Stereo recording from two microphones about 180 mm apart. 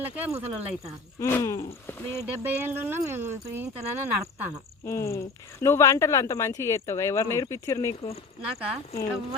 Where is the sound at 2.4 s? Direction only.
10° right (ahead or behind).